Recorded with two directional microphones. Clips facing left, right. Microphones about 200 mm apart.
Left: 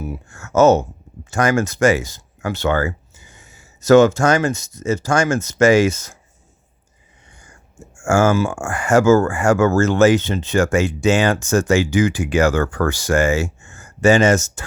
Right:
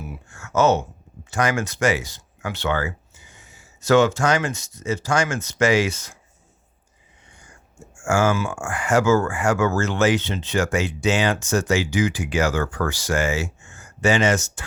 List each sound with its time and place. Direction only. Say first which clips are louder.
0.0 s speech: left 7 dB; 45° left (ahead or behind)
8.0 s speech: left 5 dB; 45° left (ahead or behind)